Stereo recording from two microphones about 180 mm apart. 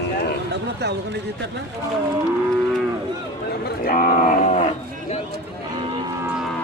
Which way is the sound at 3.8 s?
50° left (ahead or behind).